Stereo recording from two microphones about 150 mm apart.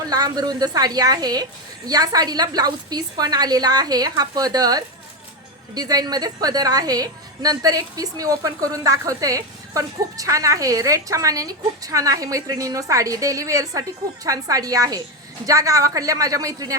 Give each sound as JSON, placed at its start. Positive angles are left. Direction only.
{"t": 0.1, "sound": "a woman's voice", "side_deg": -25}